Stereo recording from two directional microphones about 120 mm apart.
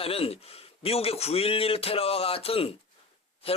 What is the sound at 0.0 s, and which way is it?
A man's voice, 55° left (ahead or behind).